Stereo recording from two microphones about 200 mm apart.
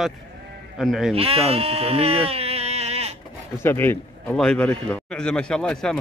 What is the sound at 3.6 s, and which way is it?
A man's voice, 10° left (ahead or behind).